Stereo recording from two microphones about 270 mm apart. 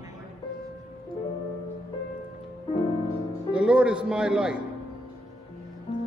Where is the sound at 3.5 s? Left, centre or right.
Centre.